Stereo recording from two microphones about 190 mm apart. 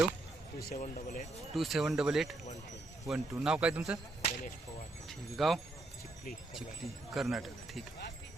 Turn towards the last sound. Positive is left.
turn(degrees=0)  # may be behind; listen again after turning